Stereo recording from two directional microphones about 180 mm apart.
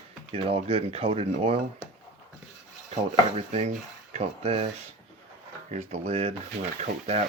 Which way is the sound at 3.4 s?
35° right (ahead or behind).